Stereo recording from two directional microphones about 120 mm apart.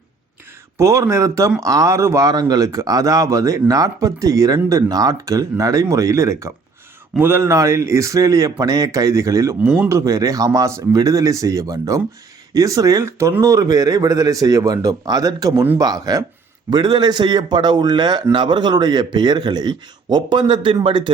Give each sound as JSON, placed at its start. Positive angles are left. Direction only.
{"t": 0.8, "sound": "speech", "side_deg": -25}
{"t": 9.6, "sound": "a man's voice", "side_deg": -15}